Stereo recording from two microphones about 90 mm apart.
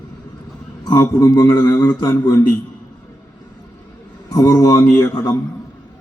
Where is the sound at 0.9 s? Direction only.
40° left (ahead or behind).